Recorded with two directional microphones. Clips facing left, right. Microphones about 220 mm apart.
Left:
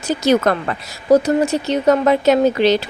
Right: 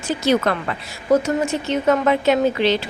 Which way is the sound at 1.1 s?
35° left (ahead or behind).